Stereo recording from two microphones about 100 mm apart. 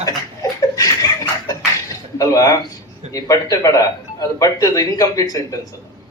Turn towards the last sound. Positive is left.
turn(degrees=35)  # may be behind; listen again after turning